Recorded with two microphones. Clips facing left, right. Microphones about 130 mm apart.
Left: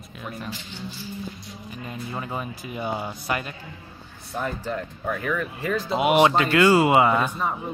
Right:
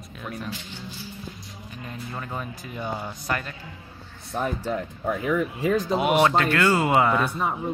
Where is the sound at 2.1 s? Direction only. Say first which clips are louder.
Left 2 dB; 15° left (ahead or behind).